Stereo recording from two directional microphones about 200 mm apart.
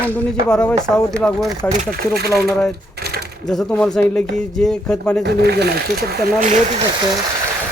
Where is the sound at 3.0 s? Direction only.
50° right (ahead or behind).